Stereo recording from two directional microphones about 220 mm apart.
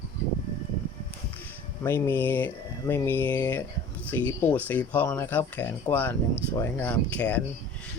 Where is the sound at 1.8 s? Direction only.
10° left (ahead or behind).